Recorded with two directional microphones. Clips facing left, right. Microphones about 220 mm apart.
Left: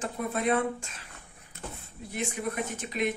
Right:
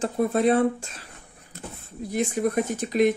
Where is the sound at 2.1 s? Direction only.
40° right (ahead or behind).